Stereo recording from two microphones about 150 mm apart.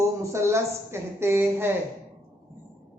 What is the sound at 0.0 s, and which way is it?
Speech, 20° right (ahead or behind).